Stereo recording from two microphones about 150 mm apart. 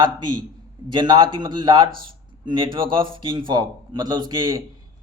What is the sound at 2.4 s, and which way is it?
A man's voice, 30° right (ahead or behind).